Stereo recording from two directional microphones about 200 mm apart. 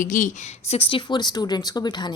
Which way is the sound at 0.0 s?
40° left (ahead or behind).